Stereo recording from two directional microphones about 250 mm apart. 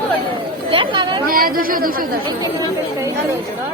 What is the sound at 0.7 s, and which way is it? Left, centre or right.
Chatter, centre.